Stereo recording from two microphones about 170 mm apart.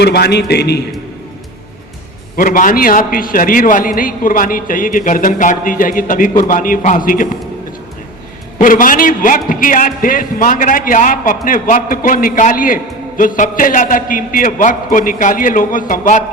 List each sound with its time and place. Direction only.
0.0 s a man's voice: 70° left (ahead or behind)
2.3 s a man's voice: 55° left (ahead or behind)
8.5 s a man's voice: 55° left (ahead or behind)